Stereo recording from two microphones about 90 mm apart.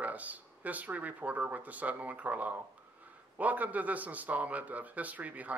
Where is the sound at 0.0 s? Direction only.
15° right (ahead or behind).